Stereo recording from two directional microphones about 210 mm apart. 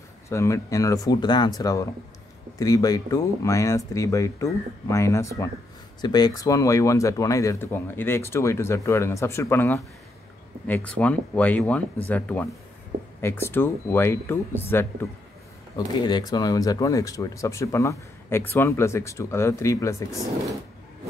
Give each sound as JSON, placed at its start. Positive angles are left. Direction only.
{"t": 0.3, "sound": "speech", "side_deg": 15}